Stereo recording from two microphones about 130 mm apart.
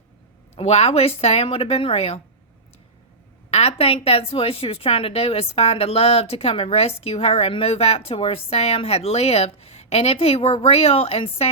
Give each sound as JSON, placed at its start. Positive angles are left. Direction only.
{"t": 0.5, "sound": "a woman's voice", "side_deg": 55}
{"t": 3.5, "sound": "a woman's voice", "side_deg": 55}